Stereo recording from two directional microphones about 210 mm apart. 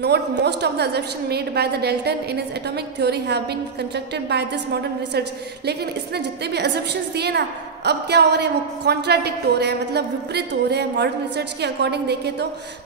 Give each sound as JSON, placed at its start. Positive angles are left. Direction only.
{"t": 0.0, "sound": "a woman's voice", "side_deg": -50}
{"t": 5.7, "sound": "a woman's voice", "side_deg": -50}